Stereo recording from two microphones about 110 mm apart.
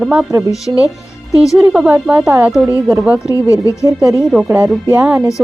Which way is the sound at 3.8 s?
30° right (ahead or behind).